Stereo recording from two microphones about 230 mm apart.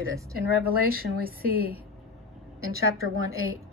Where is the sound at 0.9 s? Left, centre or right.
Right.